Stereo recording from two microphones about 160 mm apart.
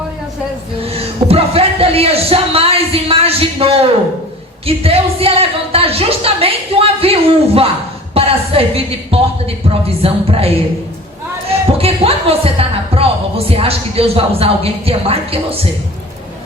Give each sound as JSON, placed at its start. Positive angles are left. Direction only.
{"t": 0.8, "sound": "a woman's voice", "side_deg": -40}
{"t": 11.8, "sound": "a woman's voice", "side_deg": -40}